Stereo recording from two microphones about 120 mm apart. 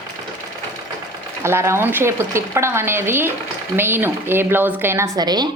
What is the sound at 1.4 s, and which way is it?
Speech, 20° right (ahead or behind).